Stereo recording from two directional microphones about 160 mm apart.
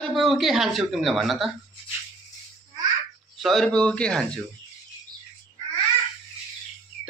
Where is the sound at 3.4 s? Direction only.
Centre (ahead or behind).